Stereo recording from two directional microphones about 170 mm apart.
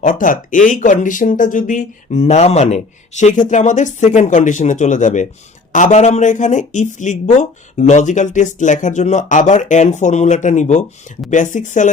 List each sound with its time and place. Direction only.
0.0 s speech: 50° left (ahead or behind)